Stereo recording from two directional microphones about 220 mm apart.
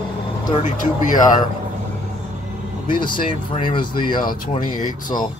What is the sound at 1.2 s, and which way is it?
Speech, 20° left (ahead or behind).